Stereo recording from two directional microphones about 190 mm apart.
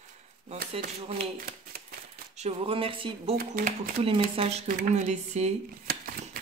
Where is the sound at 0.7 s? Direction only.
30° right (ahead or behind).